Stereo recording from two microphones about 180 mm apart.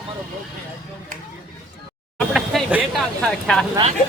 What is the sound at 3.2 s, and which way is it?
Speech, 5° left (ahead or behind).